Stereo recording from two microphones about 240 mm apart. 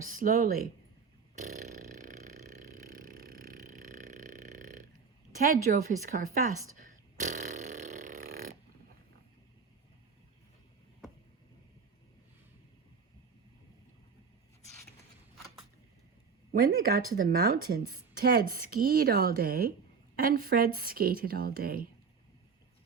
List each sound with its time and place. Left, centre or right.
0.0 s a woman's voice: right
1.5 s a sound: right
5.4 s a woman's voice: right
6.7 s burping: right
16.5 s a woman's voice: right